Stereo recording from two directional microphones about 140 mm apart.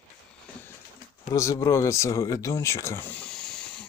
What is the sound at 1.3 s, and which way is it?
Speech, 25° left (ahead or behind).